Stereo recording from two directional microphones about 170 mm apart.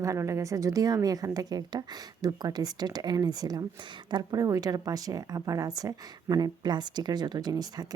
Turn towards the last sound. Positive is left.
turn(degrees=-25)  # may be behind; listen again after turning